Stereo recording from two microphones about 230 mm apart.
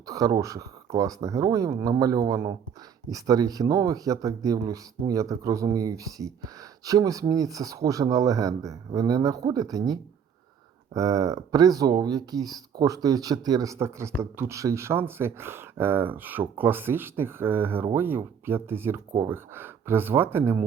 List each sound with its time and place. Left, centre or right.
0.1 s speech: centre